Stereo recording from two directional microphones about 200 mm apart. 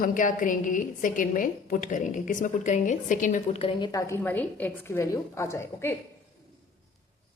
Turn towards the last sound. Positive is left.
turn(degrees=10)  # may be behind; listen again after turning